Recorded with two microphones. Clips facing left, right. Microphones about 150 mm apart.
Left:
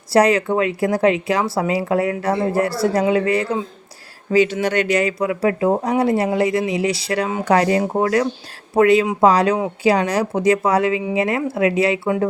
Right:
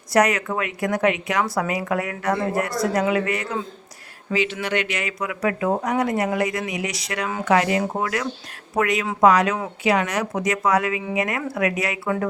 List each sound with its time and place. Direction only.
0.1 s a woman's voice: 30° left (ahead or behind)